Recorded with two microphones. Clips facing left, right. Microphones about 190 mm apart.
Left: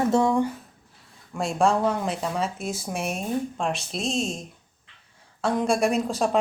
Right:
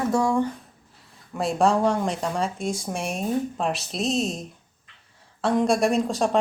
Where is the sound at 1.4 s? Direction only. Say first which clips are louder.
Right 1 dB; centre (ahead or behind).